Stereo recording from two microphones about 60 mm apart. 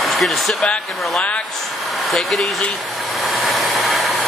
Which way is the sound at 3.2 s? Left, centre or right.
Centre.